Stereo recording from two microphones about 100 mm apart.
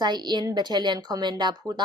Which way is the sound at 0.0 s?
45° right (ahead or behind).